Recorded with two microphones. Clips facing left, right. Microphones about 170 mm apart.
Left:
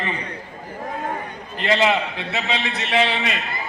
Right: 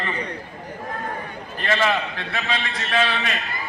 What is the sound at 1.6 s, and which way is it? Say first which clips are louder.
A man's voice: left 3 dB; 20° left (ahead or behind).